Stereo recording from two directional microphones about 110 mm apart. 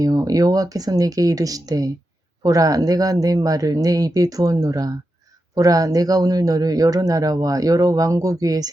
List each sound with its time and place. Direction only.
0.0 s speech: 35° right (ahead or behind)